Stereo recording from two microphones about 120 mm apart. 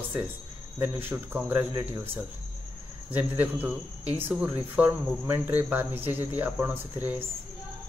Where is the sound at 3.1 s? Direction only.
15° right (ahead or behind).